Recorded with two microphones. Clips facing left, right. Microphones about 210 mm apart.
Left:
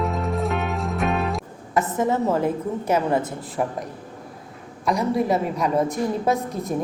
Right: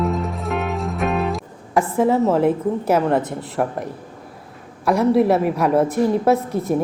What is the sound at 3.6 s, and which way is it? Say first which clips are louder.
Speech: right 3 dB; 60° right (ahead or behind).